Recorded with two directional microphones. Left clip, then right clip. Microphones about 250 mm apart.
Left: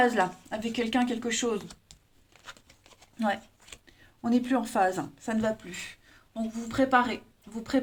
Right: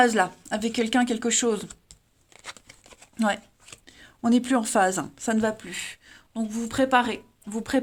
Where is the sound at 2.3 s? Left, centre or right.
Right.